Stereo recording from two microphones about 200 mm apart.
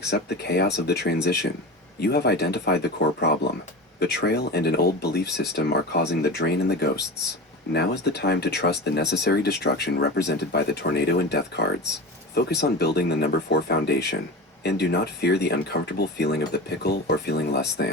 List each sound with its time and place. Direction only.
0.1 s speech: 55° left (ahead or behind)
4.0 s speech: 55° left (ahead or behind)